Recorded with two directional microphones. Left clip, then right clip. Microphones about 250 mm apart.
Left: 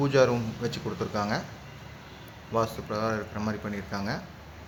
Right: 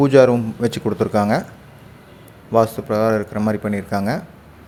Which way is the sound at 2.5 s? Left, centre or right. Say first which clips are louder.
Right 12 dB; right.